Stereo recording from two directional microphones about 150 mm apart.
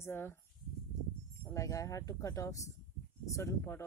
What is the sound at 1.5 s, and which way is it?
Speech, 20° left (ahead or behind).